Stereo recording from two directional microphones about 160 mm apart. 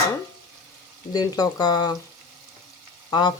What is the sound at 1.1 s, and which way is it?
Speech, 25° left (ahead or behind).